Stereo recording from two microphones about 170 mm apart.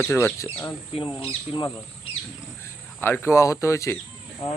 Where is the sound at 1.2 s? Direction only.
35° left (ahead or behind).